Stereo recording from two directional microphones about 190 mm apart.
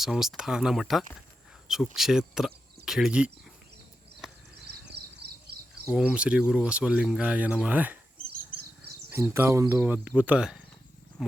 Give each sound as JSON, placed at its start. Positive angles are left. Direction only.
{"t": 0.0, "sound": "speech", "side_deg": 0}
{"t": 4.7, "sound": "a sound", "side_deg": -55}
{"t": 5.9, "sound": "speech", "side_deg": -5}
{"t": 9.0, "sound": "speech", "side_deg": -10}
{"t": 11.2, "sound": "wild animals", "side_deg": 0}